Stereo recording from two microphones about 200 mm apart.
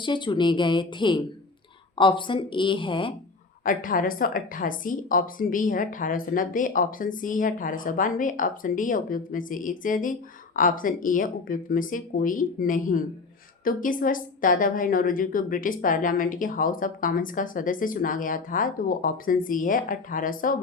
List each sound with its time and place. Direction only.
0.0 s a woman's voice: 25° left (ahead or behind)
3.6 s a woman's voice: 45° left (ahead or behind)